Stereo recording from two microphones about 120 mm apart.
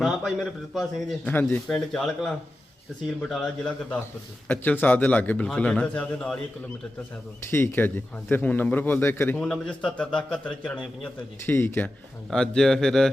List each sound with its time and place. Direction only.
0.0 s a man's voice: centre (ahead or behind)
1.2 s a man's voice: 15° left (ahead or behind)
7.5 s a man's voice: 20° left (ahead or behind)
9.4 s a man's voice: 5° left (ahead or behind)
12.3 s a man's voice: 5° left (ahead or behind)